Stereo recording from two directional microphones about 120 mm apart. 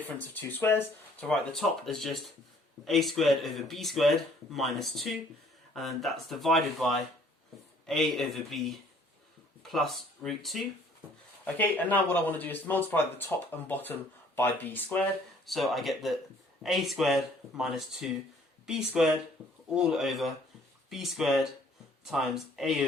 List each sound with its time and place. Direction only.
0.2 s speech: 15° left (ahead or behind)
1.3 s speech: 5° left (ahead or behind)
11.4 s speech: 15° left (ahead or behind)
15.4 s speech: centre (ahead or behind)